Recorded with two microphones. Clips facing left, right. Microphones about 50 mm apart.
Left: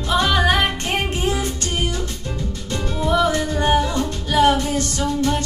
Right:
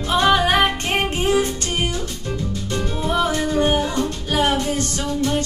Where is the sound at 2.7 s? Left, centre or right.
Right.